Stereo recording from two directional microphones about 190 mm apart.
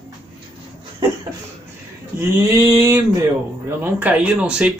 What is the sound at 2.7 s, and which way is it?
Speech, 15° right (ahead or behind).